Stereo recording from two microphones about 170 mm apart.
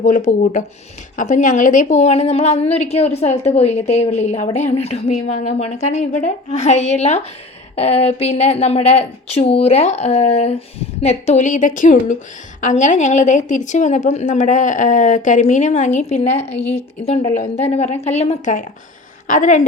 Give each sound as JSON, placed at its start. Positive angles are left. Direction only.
{"t": 0.0, "sound": "a woman's voice", "side_deg": 50}